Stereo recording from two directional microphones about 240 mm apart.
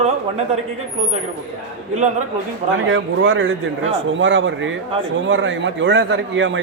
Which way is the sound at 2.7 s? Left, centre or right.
Right.